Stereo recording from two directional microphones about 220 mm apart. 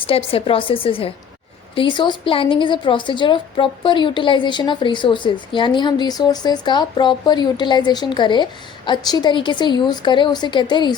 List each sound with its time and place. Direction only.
0.0 s a woman's voice: 25° left (ahead or behind)